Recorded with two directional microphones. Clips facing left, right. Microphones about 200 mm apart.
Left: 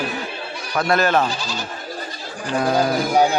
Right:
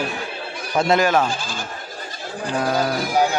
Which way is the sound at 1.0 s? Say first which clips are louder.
Even; 10° right (ahead or behind).